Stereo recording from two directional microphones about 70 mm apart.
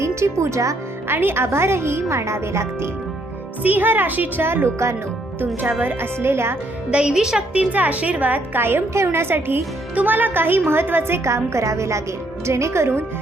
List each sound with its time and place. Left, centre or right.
0.0 s speech: right
1.0 s a woman's voice: right
3.6 s a woman's voice: right
6.9 s a woman's voice: centre; by 13.1 s right